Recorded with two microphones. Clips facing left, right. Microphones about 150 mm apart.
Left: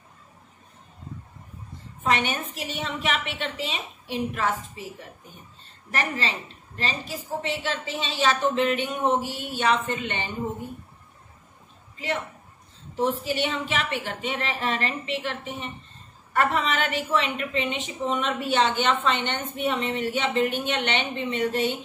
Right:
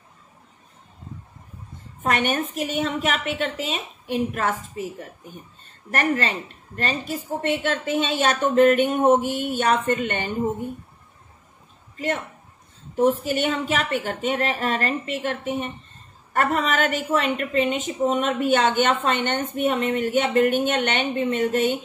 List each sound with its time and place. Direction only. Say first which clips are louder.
2.0 s a woman's voice: right 3 dB; 50° right (ahead or behind)
12.9 s a woman's voice: right 5 dB; 50° right (ahead or behind)